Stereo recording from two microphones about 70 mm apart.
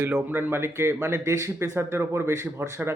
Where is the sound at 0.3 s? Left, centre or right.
Right.